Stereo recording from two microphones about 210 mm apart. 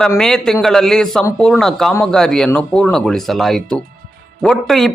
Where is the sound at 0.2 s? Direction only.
Centre (ahead or behind).